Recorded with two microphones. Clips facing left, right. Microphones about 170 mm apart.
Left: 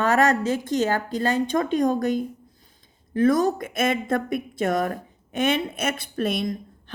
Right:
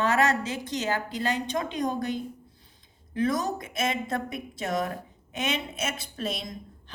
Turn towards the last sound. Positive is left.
turn(degrees=60)  # may be behind; listen again after turning